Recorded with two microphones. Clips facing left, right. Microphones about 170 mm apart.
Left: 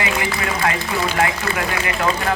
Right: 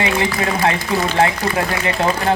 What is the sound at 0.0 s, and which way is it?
Speech, 25° right (ahead or behind).